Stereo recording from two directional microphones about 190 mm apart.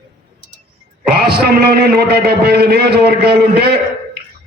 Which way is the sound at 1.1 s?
55° right (ahead or behind).